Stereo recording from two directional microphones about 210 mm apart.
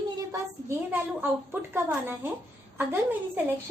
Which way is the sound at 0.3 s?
10° right (ahead or behind).